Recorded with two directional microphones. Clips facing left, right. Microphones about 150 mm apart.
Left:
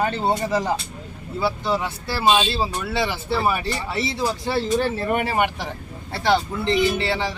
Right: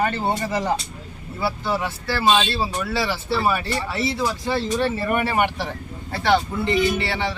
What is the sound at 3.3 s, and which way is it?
Speech, 20° left (ahead or behind).